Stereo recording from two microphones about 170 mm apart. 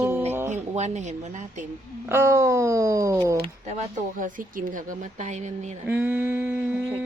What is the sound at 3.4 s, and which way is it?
Speech, 45° right (ahead or behind).